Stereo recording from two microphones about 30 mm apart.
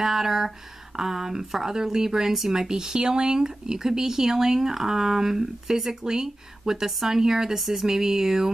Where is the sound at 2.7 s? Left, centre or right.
Right.